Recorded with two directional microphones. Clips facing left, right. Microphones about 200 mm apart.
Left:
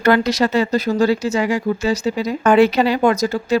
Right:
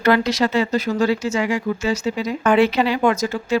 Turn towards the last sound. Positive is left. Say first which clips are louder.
# left 3 dB
turn(degrees=40)  # may be behind; listen again after turning